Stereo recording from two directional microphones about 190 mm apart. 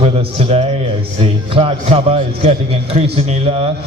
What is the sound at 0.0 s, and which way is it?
A man's voice, 30° right (ahead or behind).